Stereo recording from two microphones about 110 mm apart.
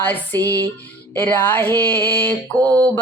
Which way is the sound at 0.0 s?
15° left (ahead or behind).